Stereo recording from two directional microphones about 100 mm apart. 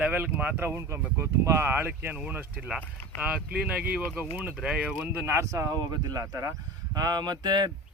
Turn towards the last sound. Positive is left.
turn(degrees=-45)  # may be behind; listen again after turning